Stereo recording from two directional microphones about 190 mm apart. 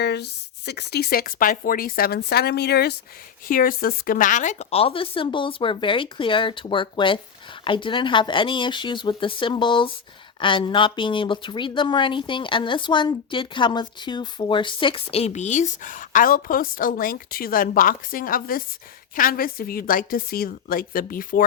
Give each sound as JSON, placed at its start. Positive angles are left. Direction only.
{"t": 0.0, "sound": "a woman's voice", "side_deg": 60}